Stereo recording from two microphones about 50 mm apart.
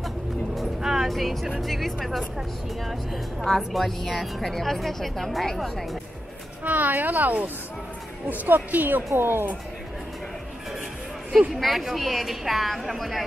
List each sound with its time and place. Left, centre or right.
1.0 s a woman's voice: centre
3.4 s a woman's voice: centre
6.6 s a woman's voice: right
9.1 s speech: right
11.5 s a woman's voice: centre